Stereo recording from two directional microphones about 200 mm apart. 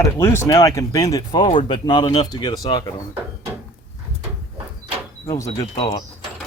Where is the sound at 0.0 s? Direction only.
15° left (ahead or behind).